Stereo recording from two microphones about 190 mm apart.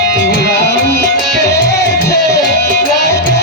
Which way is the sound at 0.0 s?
60° left (ahead or behind).